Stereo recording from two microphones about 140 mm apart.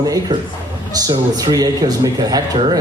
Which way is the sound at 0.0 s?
25° right (ahead or behind).